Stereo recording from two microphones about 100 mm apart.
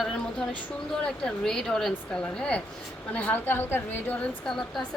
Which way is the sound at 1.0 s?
5° left (ahead or behind).